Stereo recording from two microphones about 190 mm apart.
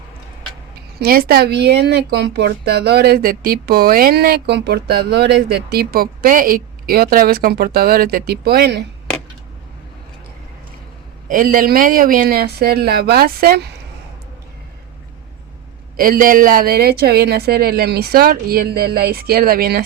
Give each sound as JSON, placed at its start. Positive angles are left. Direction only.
{"t": 0.9, "sound": "speech", "side_deg": -50}
{"t": 11.3, "sound": "speech", "side_deg": -45}
{"t": 16.0, "sound": "speech", "side_deg": -50}